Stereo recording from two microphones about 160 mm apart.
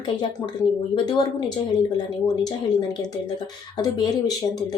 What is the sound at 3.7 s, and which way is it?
Speech, 25° left (ahead or behind).